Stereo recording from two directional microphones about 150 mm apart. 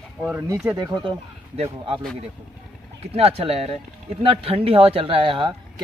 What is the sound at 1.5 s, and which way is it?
Speech, 40° right (ahead or behind).